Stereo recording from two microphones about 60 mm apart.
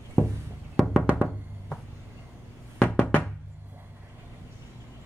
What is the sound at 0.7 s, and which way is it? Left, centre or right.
Music, centre.